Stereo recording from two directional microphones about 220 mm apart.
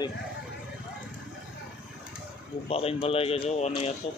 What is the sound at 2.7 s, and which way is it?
Speech, 25° left (ahead or behind).